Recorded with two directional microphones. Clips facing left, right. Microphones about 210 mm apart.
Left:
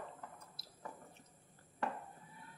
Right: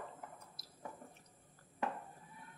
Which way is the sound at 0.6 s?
30° left (ahead or behind).